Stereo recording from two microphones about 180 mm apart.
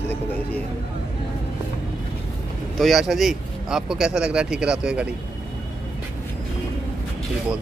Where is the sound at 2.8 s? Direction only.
Centre (ahead or behind).